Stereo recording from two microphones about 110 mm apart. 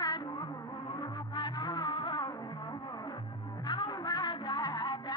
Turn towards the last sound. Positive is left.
turn(degrees=40)  # may be behind; listen again after turning